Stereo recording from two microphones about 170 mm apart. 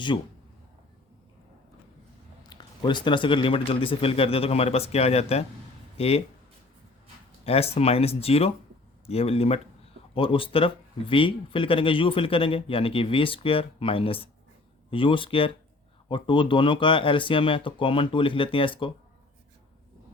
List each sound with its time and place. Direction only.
0.1 s speech: 25° left (ahead or behind)
2.5 s speech: 25° left (ahead or behind)
7.4 s speech: 35° left (ahead or behind)